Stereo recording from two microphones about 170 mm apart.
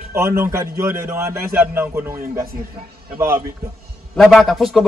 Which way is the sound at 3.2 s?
15° right (ahead or behind).